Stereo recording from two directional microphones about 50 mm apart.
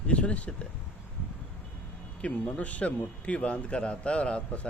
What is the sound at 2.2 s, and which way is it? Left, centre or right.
A man's voice, left.